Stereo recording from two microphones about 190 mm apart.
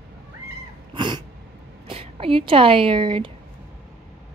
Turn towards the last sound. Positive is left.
turn(degrees=-25)  # may be behind; listen again after turning